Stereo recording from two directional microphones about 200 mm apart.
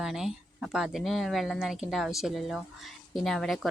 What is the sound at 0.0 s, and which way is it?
Speech, centre (ahead or behind).